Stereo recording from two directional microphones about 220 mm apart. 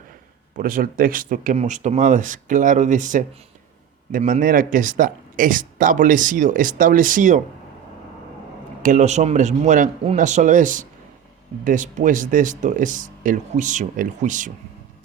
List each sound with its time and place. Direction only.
0.5 s speech: 40° right (ahead or behind)
8.8 s speech: 35° right (ahead or behind)